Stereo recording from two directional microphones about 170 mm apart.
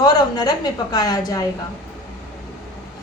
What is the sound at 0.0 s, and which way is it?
A woman's voice, 25° left (ahead or behind).